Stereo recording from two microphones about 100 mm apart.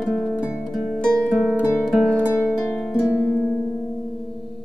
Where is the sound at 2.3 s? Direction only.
20° left (ahead or behind).